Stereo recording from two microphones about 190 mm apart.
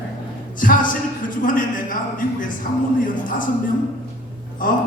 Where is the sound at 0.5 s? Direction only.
45° left (ahead or behind).